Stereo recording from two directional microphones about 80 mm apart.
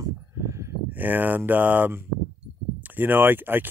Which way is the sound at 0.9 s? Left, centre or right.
Right.